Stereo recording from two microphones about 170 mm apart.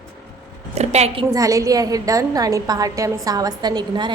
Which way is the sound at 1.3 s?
20° right (ahead or behind).